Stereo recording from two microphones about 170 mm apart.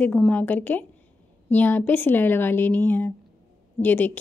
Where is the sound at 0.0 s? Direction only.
10° left (ahead or behind).